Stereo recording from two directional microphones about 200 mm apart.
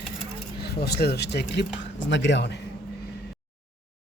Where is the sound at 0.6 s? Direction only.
55° left (ahead or behind).